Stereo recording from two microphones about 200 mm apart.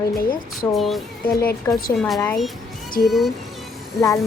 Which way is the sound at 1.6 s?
15° left (ahead or behind).